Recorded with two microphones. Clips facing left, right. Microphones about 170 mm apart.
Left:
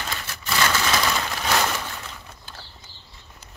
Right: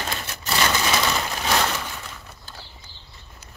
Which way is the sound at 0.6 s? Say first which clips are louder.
Even; 20° right (ahead or behind).